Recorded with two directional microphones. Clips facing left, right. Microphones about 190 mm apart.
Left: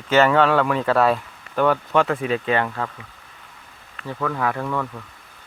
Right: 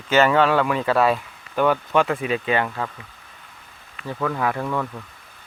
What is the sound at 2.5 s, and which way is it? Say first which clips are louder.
Speech: left 1 dB; 10° right (ahead or behind).